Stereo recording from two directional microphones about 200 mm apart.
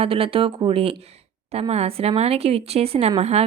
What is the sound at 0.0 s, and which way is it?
A woman's voice, 30° right (ahead or behind).